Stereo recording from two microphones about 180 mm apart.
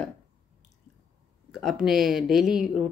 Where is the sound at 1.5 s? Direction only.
Centre (ahead or behind).